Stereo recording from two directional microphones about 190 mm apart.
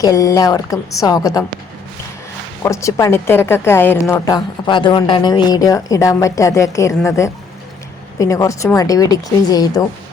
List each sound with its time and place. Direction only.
0.0 s a woman's voice: 15° left (ahead or behind)
2.6 s a woman's voice: 15° left (ahead or behind)